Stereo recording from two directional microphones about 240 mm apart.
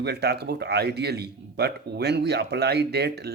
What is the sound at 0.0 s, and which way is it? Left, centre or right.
A man's voice, right.